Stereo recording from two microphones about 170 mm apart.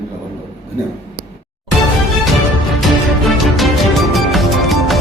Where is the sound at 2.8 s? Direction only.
Centre (ahead or behind).